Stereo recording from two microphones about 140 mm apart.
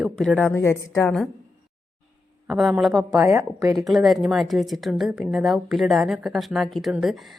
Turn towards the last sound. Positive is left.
turn(degrees=0)  # may be behind; listen again after turning